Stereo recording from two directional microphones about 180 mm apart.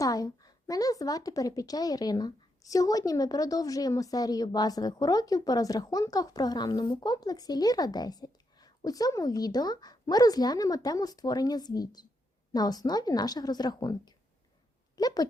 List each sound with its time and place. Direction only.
0.0 s a woman's voice: 20° left (ahead or behind)